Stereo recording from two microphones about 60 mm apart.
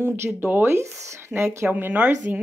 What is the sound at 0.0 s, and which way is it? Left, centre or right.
Speech, right.